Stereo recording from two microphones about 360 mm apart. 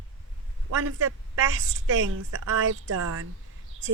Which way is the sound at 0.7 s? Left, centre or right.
Right.